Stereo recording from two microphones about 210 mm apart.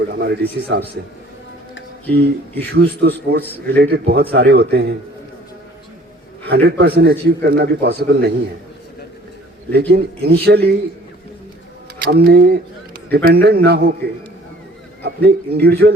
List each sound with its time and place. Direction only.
0.1 s a man's voice: 50° right (ahead or behind)
2.0 s a man's voice: 50° right (ahead or behind)
6.4 s a man's voice: 50° right (ahead or behind)
9.9 s a man's voice: 50° right (ahead or behind)
12.1 s a man's voice: 45° right (ahead or behind)
15.0 s a man's voice: 50° right (ahead or behind)